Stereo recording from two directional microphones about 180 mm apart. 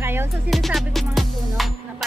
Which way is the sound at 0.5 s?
Centre (ahead or behind).